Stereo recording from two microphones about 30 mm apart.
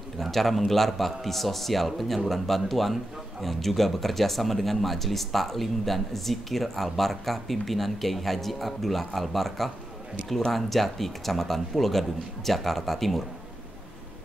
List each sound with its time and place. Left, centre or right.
0.2 s a man's voice: centre